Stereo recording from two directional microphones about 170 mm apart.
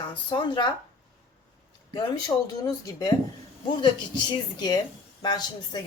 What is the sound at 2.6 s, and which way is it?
Speech, 20° left (ahead or behind).